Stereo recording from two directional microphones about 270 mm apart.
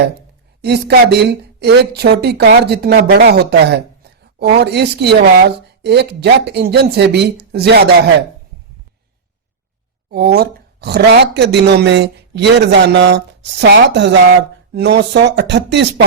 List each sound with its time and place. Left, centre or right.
0.6 s speech: right
10.1 s speech: right